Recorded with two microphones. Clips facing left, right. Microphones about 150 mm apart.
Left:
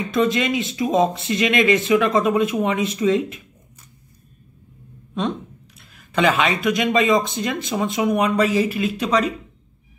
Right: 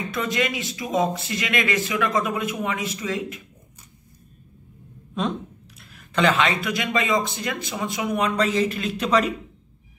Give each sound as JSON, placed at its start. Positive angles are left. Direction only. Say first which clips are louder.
{"t": 0.1, "sound": "speech", "louder": "left 7 dB", "side_deg": 25}
{"t": 5.8, "sound": "a sound", "louder": "left 3 dB", "side_deg": 0}
{"t": 6.2, "sound": "speech", "louder": "left 2 dB", "side_deg": 15}